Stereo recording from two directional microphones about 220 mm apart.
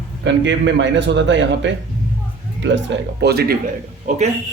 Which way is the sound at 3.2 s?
45° right (ahead or behind).